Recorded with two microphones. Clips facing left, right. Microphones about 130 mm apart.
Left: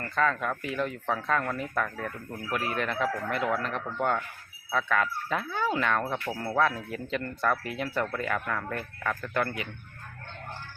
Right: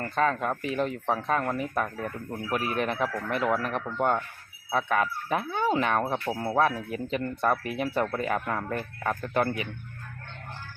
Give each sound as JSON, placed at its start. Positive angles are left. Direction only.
{"t": 0.2, "sound": "speech", "side_deg": -25}